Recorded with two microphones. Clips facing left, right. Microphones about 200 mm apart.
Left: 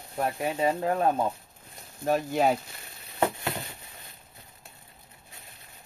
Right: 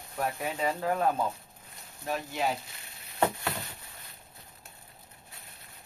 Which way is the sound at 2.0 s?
50° left (ahead or behind).